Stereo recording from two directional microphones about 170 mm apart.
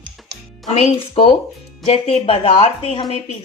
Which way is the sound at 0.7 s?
35° left (ahead or behind).